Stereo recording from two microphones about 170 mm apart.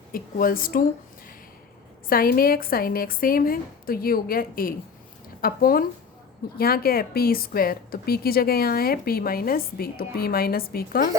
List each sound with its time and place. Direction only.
0.1 s a woman's voice: 55° left (ahead or behind)
2.0 s a woman's voice: 60° left (ahead or behind)